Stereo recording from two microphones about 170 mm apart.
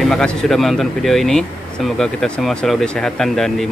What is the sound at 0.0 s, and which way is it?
Speech, 5° left (ahead or behind).